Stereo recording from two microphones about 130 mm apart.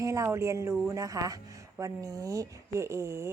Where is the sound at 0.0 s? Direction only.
25° right (ahead or behind).